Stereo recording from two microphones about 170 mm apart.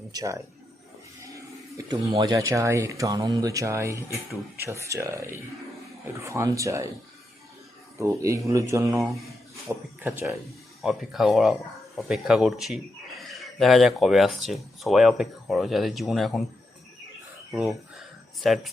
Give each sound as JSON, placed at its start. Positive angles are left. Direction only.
{"t": 0.1, "sound": "a man's voice", "side_deg": -20}
{"t": 1.2, "sound": "a sound", "side_deg": -20}
{"t": 2.1, "sound": "speech", "side_deg": -20}
{"t": 7.9, "sound": "speech", "side_deg": -15}
{"t": 10.0, "sound": "a man's voice", "side_deg": -10}
{"t": 17.5, "sound": "a man's voice", "side_deg": 0}